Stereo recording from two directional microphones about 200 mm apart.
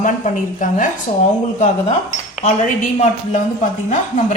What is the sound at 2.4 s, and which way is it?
A woman's voice, 35° left (ahead or behind).